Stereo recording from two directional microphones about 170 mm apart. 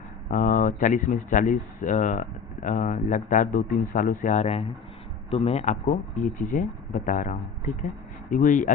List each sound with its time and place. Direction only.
0.3 s speech: 50° left (ahead or behind)